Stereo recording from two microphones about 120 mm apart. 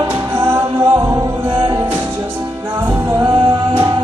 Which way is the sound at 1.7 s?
20° right (ahead or behind).